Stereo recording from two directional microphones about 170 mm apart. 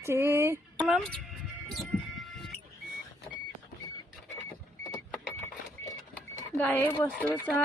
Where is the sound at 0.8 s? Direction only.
Centre (ahead or behind).